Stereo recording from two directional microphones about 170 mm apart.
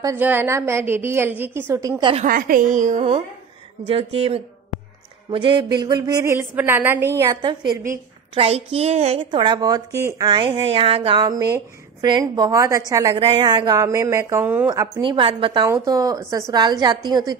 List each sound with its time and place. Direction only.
0.0 s a woman's voice: 15° right (ahead or behind)
2.2 s a woman's voice: 55° right (ahead or behind)
3.8 s a woman's voice: 35° right (ahead or behind)
6.3 s a woman's voice: 10° right (ahead or behind)
7.4 s a woman's voice: 25° right (ahead or behind)
13.1 s a woman's voice: 30° right (ahead or behind)